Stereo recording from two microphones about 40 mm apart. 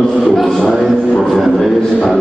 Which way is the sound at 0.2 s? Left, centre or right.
Centre.